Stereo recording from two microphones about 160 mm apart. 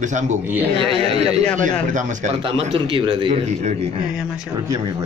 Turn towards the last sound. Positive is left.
turn(degrees=-35)  # may be behind; listen again after turning